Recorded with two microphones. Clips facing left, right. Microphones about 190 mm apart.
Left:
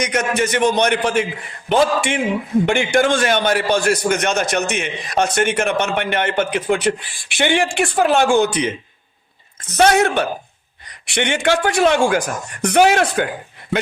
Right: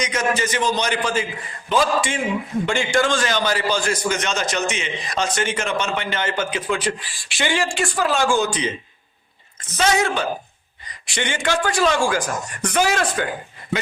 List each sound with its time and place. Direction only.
0.0 s a man's voice: 65° left (ahead or behind)
9.7 s a man's voice: 65° left (ahead or behind)